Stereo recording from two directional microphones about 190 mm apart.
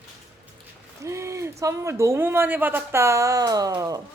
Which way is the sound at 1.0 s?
15° right (ahead or behind).